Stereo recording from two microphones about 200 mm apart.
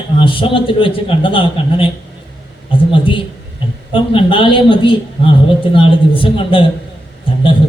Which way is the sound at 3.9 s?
25° left (ahead or behind).